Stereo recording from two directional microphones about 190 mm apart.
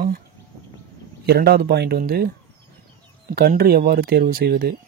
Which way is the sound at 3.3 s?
55° right (ahead or behind).